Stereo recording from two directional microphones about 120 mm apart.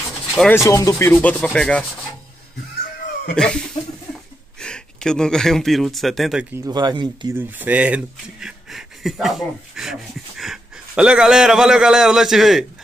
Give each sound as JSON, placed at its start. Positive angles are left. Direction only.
{"t": 0.5, "sound": "speech", "side_deg": 25}
{"t": 3.3, "sound": "speech", "side_deg": 5}
{"t": 6.5, "sound": "speech", "side_deg": -30}
{"t": 7.3, "sound": "speech", "side_deg": -15}